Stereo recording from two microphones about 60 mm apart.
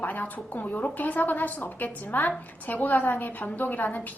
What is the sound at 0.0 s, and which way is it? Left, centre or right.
A woman's voice, left.